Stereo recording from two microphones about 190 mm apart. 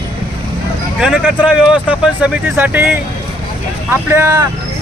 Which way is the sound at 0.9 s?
5° right (ahead or behind).